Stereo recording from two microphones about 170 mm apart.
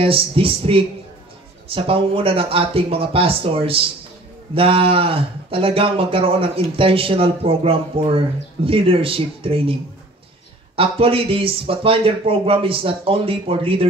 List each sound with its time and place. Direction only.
0.0 s speech: 35° right (ahead or behind)
10.8 s speech: 35° right (ahead or behind)